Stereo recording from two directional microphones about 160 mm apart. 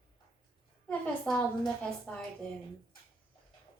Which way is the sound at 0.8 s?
5° left (ahead or behind).